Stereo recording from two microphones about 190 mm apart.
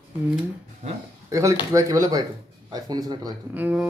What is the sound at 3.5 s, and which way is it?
Speech, 10° right (ahead or behind).